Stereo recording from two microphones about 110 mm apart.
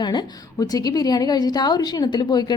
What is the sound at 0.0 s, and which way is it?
A woman's voice, 40° left (ahead or behind).